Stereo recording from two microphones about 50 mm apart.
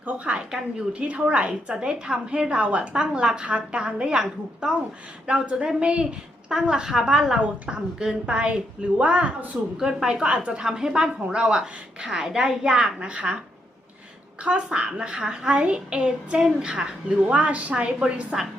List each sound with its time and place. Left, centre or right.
0.0 s a woman's voice: right
9.7 s a woman's voice: centre
14.4 s a woman's voice: right